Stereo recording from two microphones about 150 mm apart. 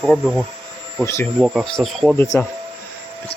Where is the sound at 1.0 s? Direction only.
20° left (ahead or behind).